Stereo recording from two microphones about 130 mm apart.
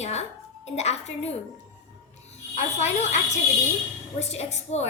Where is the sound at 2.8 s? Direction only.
60° left (ahead or behind).